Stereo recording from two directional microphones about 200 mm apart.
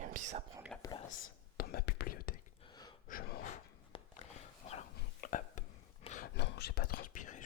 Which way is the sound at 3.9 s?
25° left (ahead or behind).